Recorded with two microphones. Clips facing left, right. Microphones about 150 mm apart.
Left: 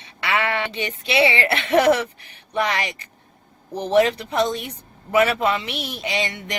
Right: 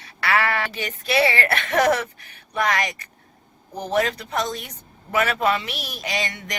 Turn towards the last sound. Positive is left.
turn(degrees=25)  # may be behind; listen again after turning